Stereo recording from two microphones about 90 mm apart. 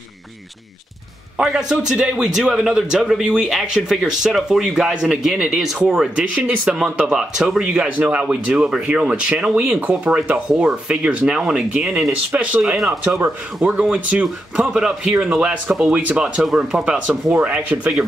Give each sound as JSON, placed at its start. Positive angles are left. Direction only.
{"t": 1.4, "sound": "a man's voice", "side_deg": -5}
{"t": 12.7, "sound": "a man's voice", "side_deg": 0}